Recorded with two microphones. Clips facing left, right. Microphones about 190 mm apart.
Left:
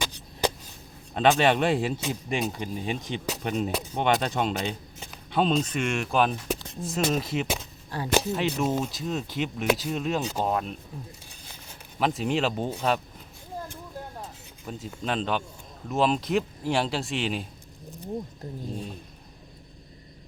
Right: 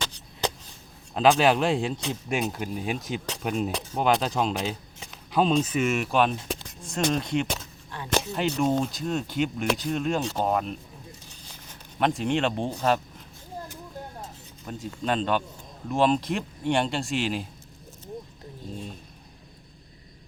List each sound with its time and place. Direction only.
1.1 s speech: centre (ahead or behind)
7.9 s speech: 35° left (ahead or behind)
8.4 s speech: 5° left (ahead or behind)
11.3 s a sound: 5° left (ahead or behind)
14.7 s speech: 5° left (ahead or behind)